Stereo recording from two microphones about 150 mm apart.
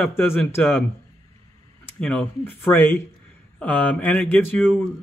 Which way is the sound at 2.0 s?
5° left (ahead or behind).